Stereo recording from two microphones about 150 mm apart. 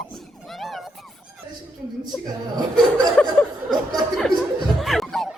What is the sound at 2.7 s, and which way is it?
Chuckle, 5° left (ahead or behind).